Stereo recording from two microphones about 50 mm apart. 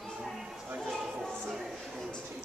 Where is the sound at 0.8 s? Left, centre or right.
Centre.